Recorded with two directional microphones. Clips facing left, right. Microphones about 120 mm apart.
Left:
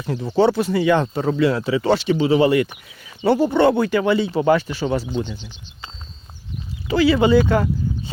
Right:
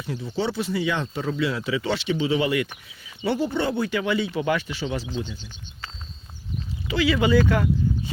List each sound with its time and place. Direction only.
0.0 s speech: 50° left (ahead or behind)
3.5 s speech: 60° left (ahead or behind)
3.9 s speech: 35° left (ahead or behind)
6.8 s speech: 35° left (ahead or behind)